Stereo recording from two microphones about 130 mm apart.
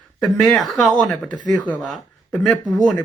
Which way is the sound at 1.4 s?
80° right.